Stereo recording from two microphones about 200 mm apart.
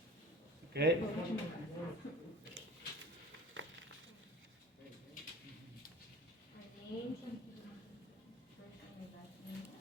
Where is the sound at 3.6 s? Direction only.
70° right (ahead or behind).